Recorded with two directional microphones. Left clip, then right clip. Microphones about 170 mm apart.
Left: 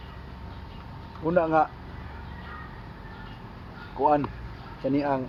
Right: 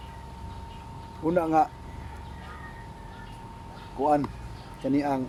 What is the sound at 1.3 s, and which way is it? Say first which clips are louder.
Speech: left 1 dB; 10° right (ahead or behind).